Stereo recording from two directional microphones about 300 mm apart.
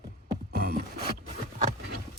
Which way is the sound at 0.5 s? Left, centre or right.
Right.